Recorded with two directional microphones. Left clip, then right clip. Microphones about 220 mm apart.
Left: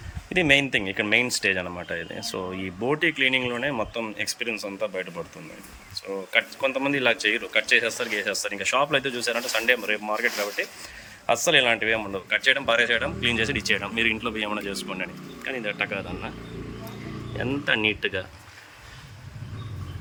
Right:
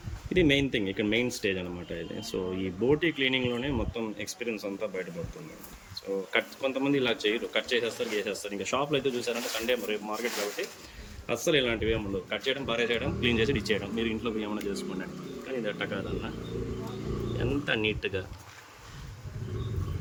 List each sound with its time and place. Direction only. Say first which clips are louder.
0.3 s speech: left 5 dB; centre (ahead or behind)
6.3 s speech: left 7 dB; centre (ahead or behind)
15.6 s speech: left 6 dB; 10° left (ahead or behind)
17.7 s speech: left 8 dB; 20° left (ahead or behind)